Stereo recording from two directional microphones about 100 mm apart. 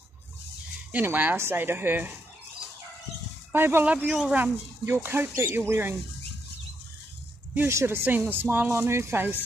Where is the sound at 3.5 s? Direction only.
20° right (ahead or behind).